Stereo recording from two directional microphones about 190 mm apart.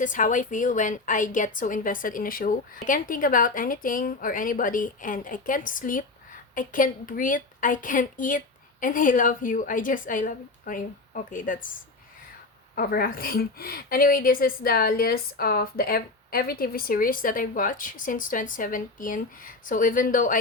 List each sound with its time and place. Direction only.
0.0 s a woman's voice: 45° left (ahead or behind)
12.7 s a woman's voice: 50° left (ahead or behind)